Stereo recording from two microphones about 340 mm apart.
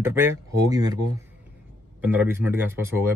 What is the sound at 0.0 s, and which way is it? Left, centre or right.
A man's voice, centre.